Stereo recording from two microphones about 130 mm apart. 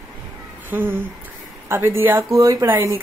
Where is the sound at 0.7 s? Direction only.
15° right (ahead or behind).